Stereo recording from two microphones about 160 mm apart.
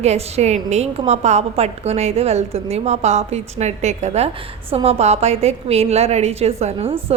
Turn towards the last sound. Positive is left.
turn(degrees=-40)  # may be behind; listen again after turning